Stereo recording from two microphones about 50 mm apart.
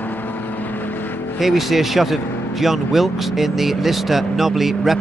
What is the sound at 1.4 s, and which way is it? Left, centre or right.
Speech, centre.